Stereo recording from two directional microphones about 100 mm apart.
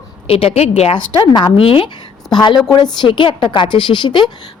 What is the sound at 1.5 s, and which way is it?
Speech, 65° left (ahead or behind).